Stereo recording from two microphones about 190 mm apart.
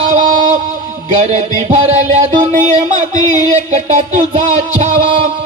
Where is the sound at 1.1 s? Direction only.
35° right (ahead or behind).